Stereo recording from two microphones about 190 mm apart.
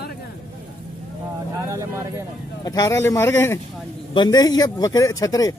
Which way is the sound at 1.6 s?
15° right (ahead or behind).